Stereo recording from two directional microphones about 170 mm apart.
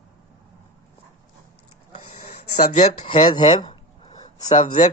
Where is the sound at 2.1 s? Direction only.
40° left (ahead or behind).